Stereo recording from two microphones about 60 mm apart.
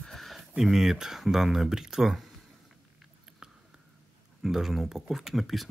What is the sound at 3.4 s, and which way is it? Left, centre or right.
Whispering, centre.